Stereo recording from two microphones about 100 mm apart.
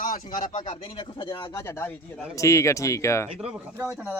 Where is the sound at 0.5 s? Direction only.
90° left.